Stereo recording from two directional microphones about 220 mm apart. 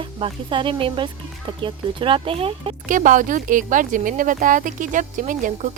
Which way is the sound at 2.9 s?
35° right (ahead or behind).